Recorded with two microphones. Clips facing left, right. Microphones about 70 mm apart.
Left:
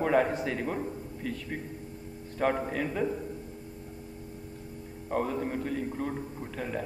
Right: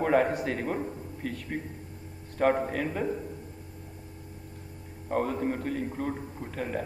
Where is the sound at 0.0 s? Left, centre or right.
Right.